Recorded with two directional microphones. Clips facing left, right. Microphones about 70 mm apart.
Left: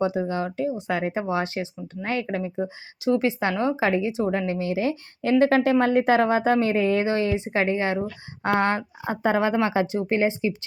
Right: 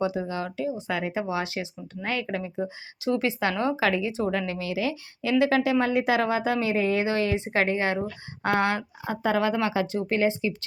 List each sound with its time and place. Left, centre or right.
0.0 s speech: left
2.3 s speech: centre